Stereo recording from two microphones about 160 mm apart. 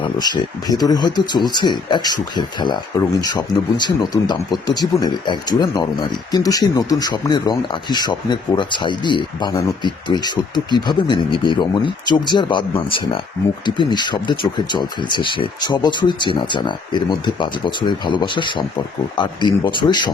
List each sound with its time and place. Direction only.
0.0 s speech: 25° left (ahead or behind)